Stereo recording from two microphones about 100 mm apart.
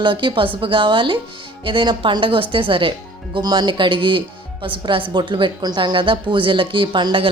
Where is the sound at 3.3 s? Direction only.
45° right (ahead or behind).